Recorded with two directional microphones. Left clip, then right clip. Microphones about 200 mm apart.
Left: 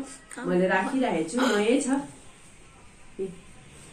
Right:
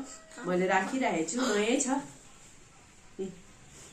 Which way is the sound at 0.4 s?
45° left (ahead or behind).